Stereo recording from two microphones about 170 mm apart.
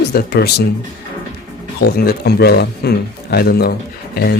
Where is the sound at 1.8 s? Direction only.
65° left (ahead or behind).